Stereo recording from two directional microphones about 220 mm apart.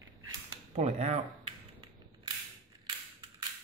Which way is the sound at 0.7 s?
30° right (ahead or behind).